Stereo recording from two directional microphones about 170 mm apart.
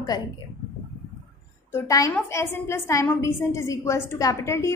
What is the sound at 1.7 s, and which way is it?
A woman's voice, 15° left (ahead or behind).